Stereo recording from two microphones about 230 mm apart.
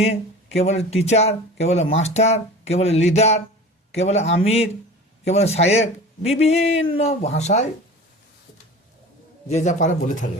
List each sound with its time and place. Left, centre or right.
0.5 s speech: left
9.5 s a man's voice: left